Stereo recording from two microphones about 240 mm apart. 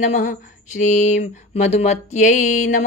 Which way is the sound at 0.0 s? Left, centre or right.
Left.